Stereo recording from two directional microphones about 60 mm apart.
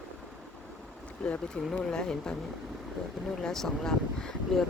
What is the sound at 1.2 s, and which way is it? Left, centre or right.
Speech, centre.